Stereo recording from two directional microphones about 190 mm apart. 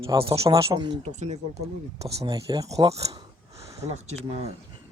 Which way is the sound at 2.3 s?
20° right (ahead or behind).